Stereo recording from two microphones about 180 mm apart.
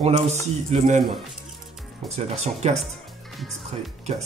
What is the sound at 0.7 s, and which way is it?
Speech, 40° right (ahead or behind).